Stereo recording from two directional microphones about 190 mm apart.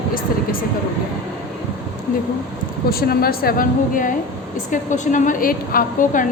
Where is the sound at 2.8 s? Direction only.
50° left (ahead or behind).